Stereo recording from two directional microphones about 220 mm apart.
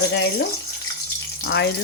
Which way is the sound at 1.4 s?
50° left (ahead or behind).